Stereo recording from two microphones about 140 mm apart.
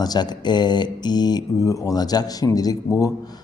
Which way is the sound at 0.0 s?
30° left (ahead or behind).